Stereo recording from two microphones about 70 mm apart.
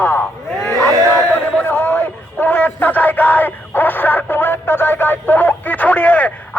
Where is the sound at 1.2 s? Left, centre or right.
Left.